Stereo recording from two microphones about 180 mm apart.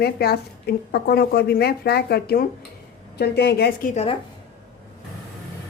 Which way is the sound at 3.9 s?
35° left (ahead or behind).